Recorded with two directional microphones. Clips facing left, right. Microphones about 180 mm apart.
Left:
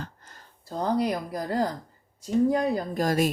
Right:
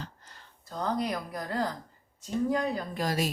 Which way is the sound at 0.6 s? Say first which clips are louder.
Left 5 dB; 30° left (ahead or behind).